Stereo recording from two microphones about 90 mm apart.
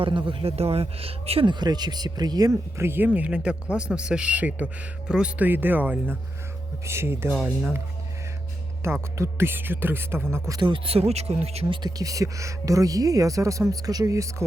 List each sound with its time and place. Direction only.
0.0 s speech: 65° right (ahead or behind); by 1.5 s 90° right
1.5 s speech: 50° right (ahead or behind)
2.7 s speech: 25° right (ahead or behind); by 5.5 s 10° right (ahead or behind)
5.5 s speech: 20° right (ahead or behind)
8.8 s speech: 30° right (ahead or behind)
10.6 s speech: 80° right
11.7 s speech: 50° right (ahead or behind)